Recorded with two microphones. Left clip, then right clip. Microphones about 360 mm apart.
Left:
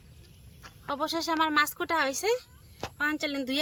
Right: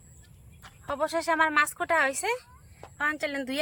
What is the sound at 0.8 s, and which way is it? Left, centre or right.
Speech, centre.